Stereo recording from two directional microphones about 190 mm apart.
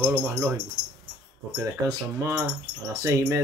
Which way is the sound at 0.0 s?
5° right (ahead or behind).